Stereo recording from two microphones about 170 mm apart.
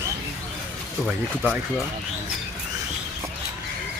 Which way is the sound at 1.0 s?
5° left (ahead or behind).